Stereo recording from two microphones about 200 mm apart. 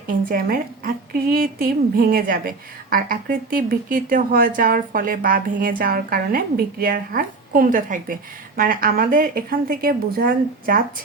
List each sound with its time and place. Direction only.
0.3 s a woman's voice: 45° right (ahead or behind)